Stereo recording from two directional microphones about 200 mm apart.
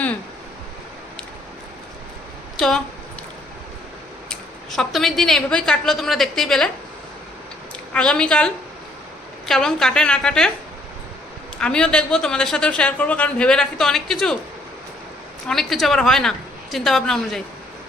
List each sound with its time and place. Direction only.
2.6 s a man's voice: 5° left (ahead or behind)
4.3 s a man's voice: centre (ahead or behind)
7.9 s a man's voice: 5° left (ahead or behind)
11.5 s a man's voice: 5° left (ahead or behind)
15.4 s a man's voice: centre (ahead or behind)